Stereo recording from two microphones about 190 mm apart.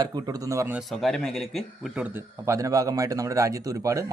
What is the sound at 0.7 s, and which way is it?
Speech, centre (ahead or behind).